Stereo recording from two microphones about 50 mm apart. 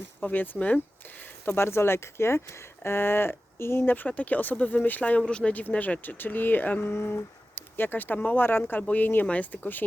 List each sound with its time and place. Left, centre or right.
0.2 s speech: left
1.2 s speech: left
3.9 s speech: left
5.2 s speech: centre
5.5 s speech: left
6.9 s speech: left